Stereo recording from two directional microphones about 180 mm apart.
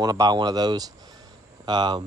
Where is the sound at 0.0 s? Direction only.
20° right (ahead or behind).